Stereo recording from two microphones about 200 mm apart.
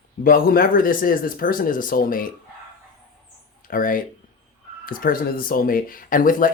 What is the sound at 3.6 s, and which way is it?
Speech, 45° left (ahead or behind).